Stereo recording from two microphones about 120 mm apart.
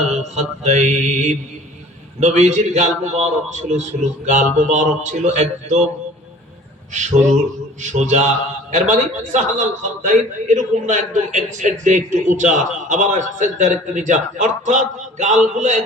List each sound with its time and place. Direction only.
0.0 s a man's voice: 70° right (ahead or behind)
6.9 s a man's voice: 80° right